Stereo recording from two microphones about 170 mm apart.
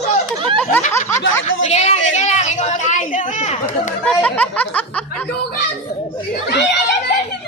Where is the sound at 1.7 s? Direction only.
40° left (ahead or behind).